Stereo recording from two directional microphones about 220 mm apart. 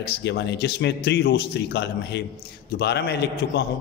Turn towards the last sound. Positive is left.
turn(degrees=50)  # may be behind; listen again after turning